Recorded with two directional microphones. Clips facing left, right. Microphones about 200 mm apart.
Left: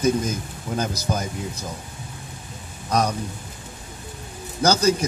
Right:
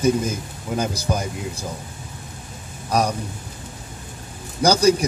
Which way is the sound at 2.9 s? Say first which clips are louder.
Right 1 dB; 10° right (ahead or behind).